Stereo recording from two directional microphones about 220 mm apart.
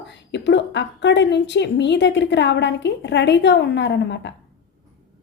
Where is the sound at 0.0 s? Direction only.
50° left (ahead or behind).